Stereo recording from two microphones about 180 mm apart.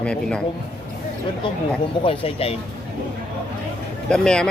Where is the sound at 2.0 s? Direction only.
30° left (ahead or behind).